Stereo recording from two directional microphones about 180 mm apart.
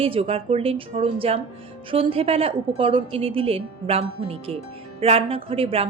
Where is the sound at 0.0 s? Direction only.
30° right (ahead or behind).